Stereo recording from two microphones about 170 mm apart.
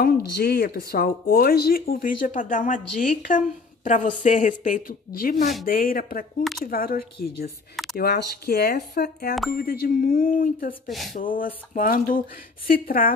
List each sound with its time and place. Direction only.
0.0 s speech: 65° left (ahead or behind)
10.9 s speech: centre (ahead or behind)
11.1 s speech: 55° left (ahead or behind)